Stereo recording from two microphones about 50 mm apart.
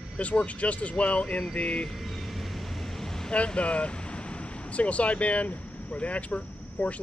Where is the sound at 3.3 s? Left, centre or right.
Left.